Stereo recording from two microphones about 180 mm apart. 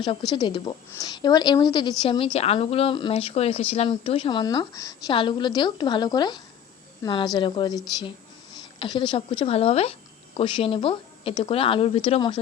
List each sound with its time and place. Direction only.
0.0 s a woman's voice: 25° left (ahead or behind)
8.8 s a woman's voice: 25° left (ahead or behind)